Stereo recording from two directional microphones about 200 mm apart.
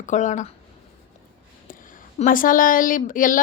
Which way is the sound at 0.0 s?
40° left (ahead or behind).